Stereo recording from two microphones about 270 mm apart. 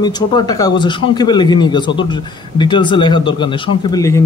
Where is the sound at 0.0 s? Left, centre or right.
Centre.